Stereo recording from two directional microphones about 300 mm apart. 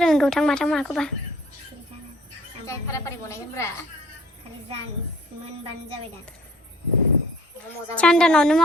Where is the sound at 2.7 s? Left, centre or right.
Centre.